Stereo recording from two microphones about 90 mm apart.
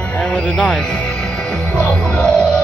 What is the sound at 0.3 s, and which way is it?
Speech, 10° left (ahead or behind).